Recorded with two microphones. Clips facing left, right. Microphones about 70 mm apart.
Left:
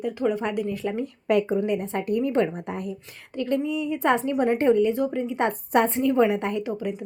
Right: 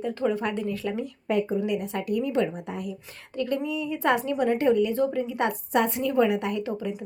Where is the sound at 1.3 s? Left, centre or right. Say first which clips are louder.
Left 4 dB; left.